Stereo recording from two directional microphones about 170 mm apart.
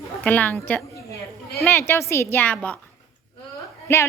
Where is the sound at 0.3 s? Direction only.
10° left (ahead or behind).